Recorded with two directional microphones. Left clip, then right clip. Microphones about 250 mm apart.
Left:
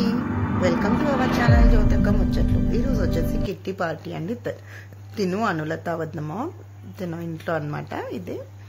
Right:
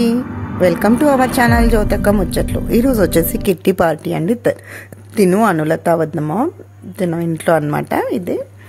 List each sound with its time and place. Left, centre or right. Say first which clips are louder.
0.2 s vehicle: right 2 dB; centre
1.0 s speech: right 11 dB; centre
1.7 s speech: right 10 dB; right